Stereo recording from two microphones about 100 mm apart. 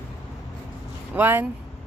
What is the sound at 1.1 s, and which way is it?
Speech, 20° right (ahead or behind).